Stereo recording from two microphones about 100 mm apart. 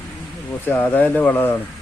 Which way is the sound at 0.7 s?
20° left (ahead or behind).